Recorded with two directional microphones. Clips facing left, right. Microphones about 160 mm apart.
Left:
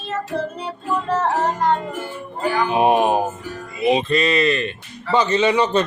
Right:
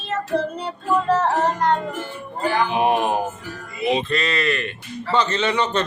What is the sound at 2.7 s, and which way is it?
Speech, 20° left (ahead or behind).